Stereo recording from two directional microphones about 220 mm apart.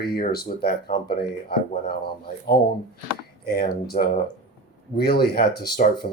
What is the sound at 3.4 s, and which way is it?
Speech, 45° left (ahead or behind).